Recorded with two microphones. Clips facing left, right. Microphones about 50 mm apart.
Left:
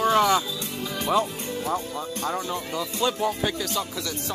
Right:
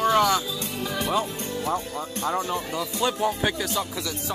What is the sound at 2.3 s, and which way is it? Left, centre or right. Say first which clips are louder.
Speech: right 2 dB; right.